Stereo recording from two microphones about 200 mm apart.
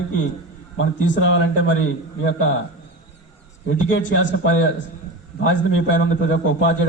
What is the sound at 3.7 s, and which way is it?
A man's voice, 65° left (ahead or behind).